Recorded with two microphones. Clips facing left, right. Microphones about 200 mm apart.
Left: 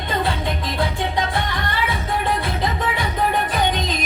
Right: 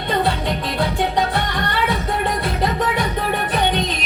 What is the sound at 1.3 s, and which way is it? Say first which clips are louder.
Music: right 2 dB; 65° right (ahead or behind).